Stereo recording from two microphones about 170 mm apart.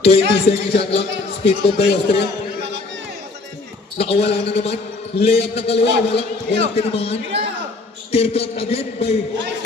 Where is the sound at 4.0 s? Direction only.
35° left (ahead or behind).